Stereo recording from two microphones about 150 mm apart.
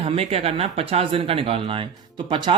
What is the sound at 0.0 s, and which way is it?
Speech, 40° right (ahead or behind).